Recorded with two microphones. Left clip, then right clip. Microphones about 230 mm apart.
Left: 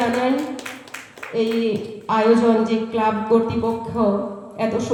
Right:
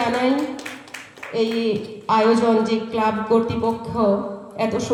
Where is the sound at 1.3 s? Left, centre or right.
Right.